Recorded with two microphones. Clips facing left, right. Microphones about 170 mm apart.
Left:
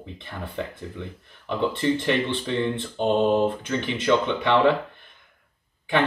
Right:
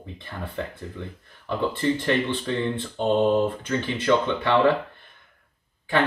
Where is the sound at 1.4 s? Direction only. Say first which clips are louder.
Left 1 dB; 20° left (ahead or behind).